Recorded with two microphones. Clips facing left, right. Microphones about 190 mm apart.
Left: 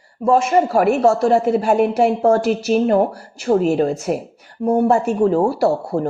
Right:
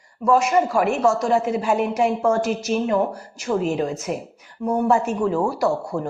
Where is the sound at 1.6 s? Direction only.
50° left (ahead or behind).